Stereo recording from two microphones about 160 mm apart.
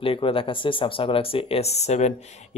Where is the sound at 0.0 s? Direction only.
35° left (ahead or behind).